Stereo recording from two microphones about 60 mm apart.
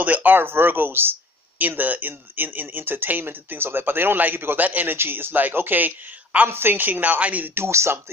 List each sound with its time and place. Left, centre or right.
0.0 s speech: right
4.9 s speech: right
7.5 s speech: right